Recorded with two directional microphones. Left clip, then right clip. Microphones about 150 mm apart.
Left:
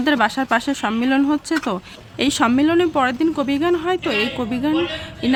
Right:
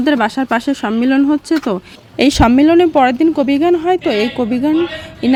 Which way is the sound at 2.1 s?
35° right (ahead or behind).